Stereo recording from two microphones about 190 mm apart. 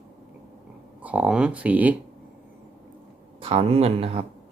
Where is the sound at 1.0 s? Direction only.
5° right (ahead or behind).